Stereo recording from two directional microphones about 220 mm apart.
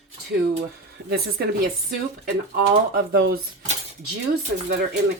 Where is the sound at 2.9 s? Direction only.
45° right (ahead or behind).